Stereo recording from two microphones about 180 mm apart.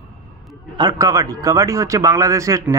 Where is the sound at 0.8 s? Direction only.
20° right (ahead or behind).